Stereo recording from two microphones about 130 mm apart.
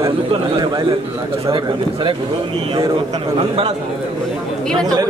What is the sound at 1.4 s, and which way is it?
Speech, 40° right (ahead or behind).